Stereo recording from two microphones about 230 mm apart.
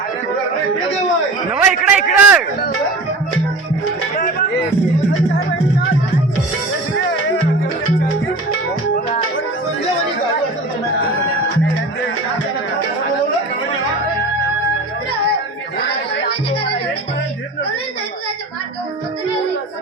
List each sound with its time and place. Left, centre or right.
1.5 s a man's voice: centre
15.8 s music: left